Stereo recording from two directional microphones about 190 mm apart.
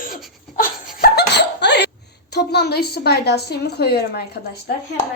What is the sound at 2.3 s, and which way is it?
A woman's voice, 60° left (ahead or behind).